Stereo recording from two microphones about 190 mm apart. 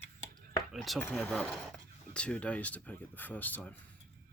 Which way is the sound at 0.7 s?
Centre (ahead or behind).